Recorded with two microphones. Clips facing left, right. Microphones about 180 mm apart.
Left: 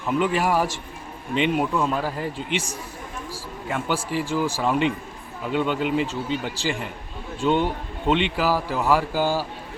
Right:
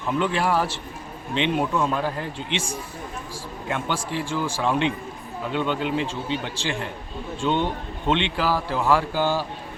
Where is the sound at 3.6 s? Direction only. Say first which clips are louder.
Left 1 dB; 5° left (ahead or behind).